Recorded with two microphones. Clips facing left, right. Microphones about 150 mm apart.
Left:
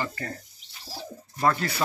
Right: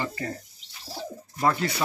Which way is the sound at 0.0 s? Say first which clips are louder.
Right 1 dB; 15° right (ahead or behind).